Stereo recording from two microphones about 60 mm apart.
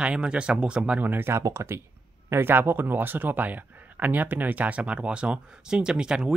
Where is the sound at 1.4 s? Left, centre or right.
Right.